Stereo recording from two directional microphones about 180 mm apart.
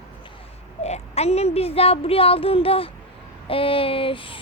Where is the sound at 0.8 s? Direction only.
35° left (ahead or behind).